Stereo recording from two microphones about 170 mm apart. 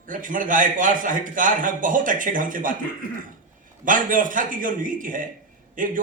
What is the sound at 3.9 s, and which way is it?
A man's voice, 50° right (ahead or behind).